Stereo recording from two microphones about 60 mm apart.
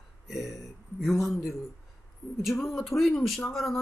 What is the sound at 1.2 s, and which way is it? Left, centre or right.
Speech, left.